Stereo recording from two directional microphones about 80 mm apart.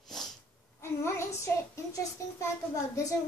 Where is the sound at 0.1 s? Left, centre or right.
Centre.